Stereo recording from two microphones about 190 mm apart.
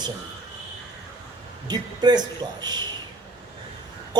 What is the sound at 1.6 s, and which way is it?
A man's voice, 20° right (ahead or behind).